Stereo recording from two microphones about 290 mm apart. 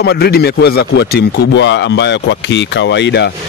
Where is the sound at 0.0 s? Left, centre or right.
Left.